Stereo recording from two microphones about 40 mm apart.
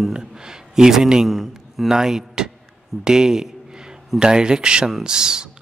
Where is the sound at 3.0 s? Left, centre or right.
Centre.